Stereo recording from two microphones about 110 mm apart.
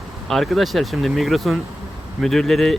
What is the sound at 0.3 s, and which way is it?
Speech, centre (ahead or behind).